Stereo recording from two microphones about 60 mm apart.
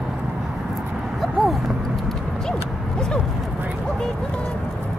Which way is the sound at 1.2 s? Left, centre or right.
Centre.